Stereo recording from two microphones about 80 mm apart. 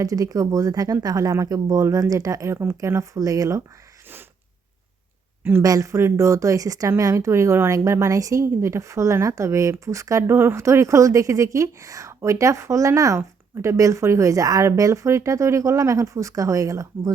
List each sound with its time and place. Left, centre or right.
0.0 s speech: right
5.4 s a sound: right
5.6 s speech: right